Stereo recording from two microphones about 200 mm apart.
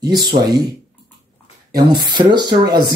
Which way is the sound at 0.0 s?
20° right (ahead or behind).